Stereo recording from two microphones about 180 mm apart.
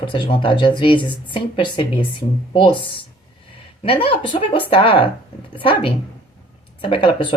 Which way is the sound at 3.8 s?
30° left (ahead or behind).